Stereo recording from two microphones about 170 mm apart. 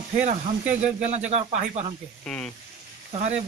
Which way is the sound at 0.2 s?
45° right (ahead or behind).